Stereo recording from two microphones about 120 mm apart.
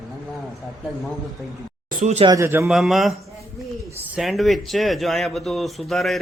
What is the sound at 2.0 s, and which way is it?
Speech, 70° right (ahead or behind).